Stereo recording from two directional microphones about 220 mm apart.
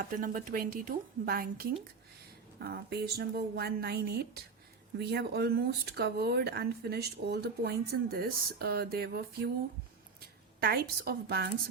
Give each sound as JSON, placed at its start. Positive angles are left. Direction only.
{"t": 0.0, "sound": "speech", "side_deg": -40}
{"t": 10.6, "sound": "speech", "side_deg": -45}